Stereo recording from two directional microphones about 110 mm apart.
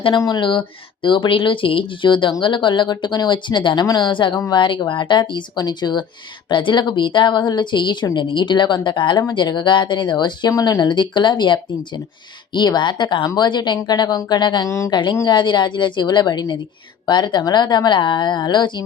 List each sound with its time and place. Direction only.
0.2 s a woman's voice: 40° left (ahead or behind)